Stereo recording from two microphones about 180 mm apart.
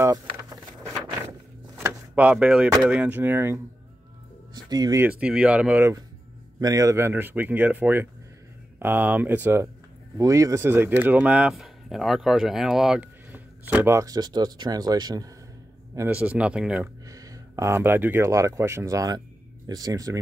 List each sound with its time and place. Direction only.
0.0 s vehicle: 20° right (ahead or behind)
1.8 s door: 10° right (ahead or behind)
2.8 s speech: 5° right (ahead or behind)
4.6 s speech: 20° right (ahead or behind)
5.2 s speech: 5° right (ahead or behind)
17.1 s speech: 20° right (ahead or behind)